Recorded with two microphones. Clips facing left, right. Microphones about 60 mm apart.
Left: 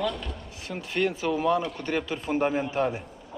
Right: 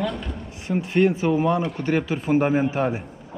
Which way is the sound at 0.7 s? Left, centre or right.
Centre.